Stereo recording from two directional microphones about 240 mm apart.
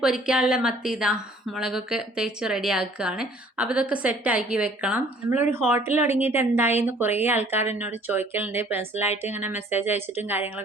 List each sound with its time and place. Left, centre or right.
0.0 s a woman's voice: centre
9.0 s speech: left
9.4 s speech: centre